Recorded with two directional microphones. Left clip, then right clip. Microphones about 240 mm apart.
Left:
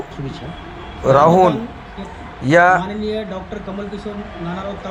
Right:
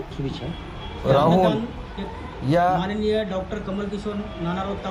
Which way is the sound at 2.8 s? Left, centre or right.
Centre.